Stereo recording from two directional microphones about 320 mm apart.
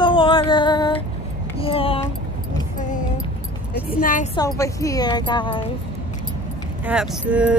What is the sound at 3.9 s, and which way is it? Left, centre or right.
Speech, left.